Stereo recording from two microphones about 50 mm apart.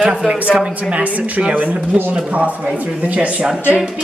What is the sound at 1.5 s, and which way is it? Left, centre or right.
Speech, right.